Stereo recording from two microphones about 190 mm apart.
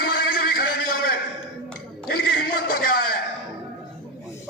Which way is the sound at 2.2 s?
55° left (ahead or behind).